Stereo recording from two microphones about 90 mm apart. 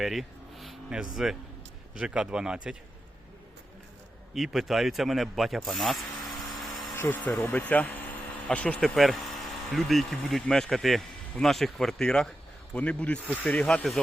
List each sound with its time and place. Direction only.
0.0 s speech: centre (ahead or behind)
4.4 s speech: 5° right (ahead or behind)
6.9 s speech: 25° left (ahead or behind)
9.0 s speech: centre (ahead or behind)